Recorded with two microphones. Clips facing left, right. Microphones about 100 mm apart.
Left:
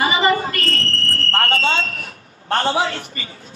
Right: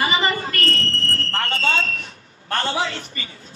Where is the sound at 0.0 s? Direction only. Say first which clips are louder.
Left 4 dB; 25° left (ahead or behind).